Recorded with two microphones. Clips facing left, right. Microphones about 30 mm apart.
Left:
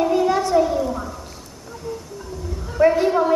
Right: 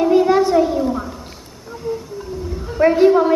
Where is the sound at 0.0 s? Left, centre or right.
Centre.